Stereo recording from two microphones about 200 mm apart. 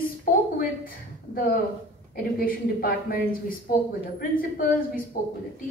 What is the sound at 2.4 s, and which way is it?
A woman's voice, 45° left (ahead or behind).